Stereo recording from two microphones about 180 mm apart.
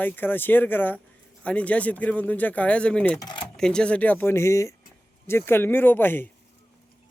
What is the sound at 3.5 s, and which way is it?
Speech, 5° left (ahead or behind).